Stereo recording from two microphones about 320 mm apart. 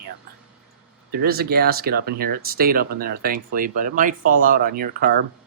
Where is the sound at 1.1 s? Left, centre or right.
Right.